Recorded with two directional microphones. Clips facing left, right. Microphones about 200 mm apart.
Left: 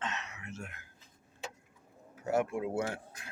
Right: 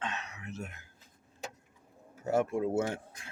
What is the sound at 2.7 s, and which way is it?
Speech, 25° right (ahead or behind).